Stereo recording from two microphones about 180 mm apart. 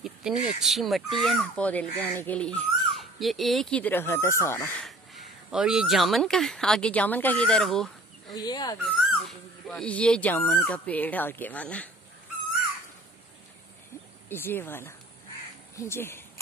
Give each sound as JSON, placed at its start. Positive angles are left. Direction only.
{"t": 0.0, "sound": "speech", "side_deg": 0}
{"t": 4.8, "sound": "speech", "side_deg": 0}
{"t": 8.4, "sound": "speech", "side_deg": 20}
{"t": 8.8, "sound": "dog", "side_deg": 0}
{"t": 10.6, "sound": "speech", "side_deg": 5}
{"t": 14.3, "sound": "speech", "side_deg": 10}